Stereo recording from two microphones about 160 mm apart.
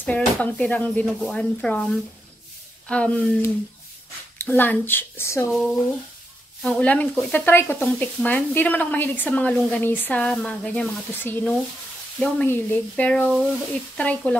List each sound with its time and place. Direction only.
0.0 s speech: 10° left (ahead or behind)
5.5 s speech: centre (ahead or behind)